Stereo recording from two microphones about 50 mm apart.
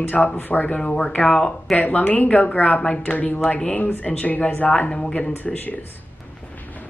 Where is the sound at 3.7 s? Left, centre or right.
Left.